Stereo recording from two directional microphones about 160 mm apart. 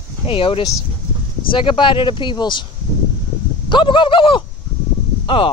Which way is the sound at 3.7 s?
30° left (ahead or behind).